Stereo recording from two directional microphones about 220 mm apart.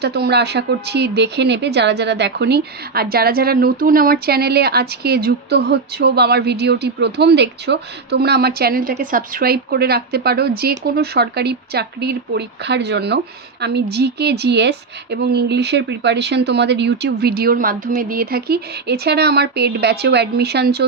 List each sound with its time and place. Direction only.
0.0 s speech: 50° right (ahead or behind)